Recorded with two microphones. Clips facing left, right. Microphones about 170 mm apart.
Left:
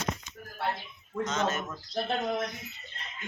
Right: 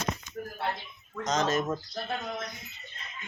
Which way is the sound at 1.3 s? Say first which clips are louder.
Right 6 dB; 35° right (ahead or behind).